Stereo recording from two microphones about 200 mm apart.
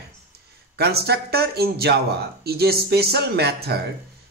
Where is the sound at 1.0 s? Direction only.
55° right (ahead or behind).